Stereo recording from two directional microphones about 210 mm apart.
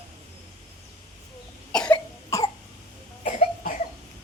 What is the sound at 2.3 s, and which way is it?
Cough, 15° left (ahead or behind).